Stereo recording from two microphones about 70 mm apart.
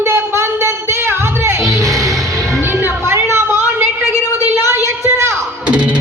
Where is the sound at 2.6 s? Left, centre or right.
Right.